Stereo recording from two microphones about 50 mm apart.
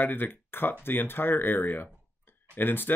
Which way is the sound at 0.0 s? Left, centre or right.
Left.